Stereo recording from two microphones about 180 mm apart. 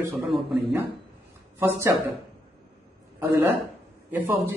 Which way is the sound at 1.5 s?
15° right (ahead or behind).